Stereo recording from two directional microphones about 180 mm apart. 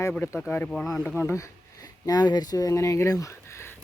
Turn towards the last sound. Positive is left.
turn(degrees=15)  # may be behind; listen again after turning